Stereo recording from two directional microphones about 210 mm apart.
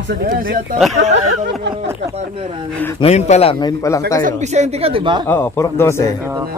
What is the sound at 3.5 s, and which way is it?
Speech, 15° left (ahead or behind).